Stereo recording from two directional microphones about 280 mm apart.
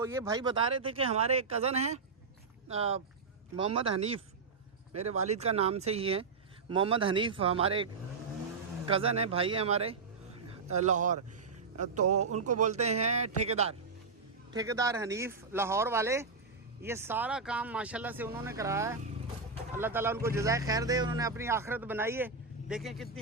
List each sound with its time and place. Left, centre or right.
0.0 s speech: centre
8.9 s speech: right
12.0 s speech: right
12.5 s speech: right
14.5 s speech: centre